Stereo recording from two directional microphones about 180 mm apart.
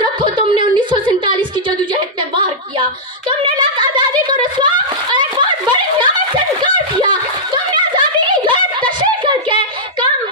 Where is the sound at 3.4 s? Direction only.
25° right (ahead or behind).